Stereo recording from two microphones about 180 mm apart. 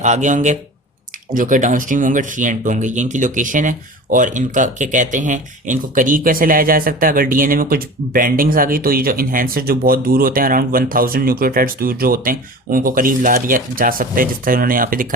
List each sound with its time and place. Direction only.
0.0 s speech: 40° right (ahead or behind)